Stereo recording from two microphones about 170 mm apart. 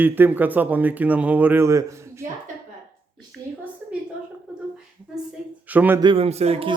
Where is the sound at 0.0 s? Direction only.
10° right (ahead or behind).